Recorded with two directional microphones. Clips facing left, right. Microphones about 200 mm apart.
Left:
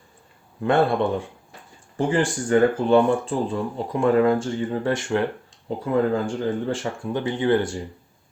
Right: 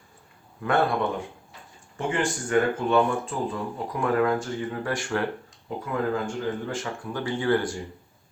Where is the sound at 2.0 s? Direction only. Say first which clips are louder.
Left 5 dB; 35° left (ahead or behind).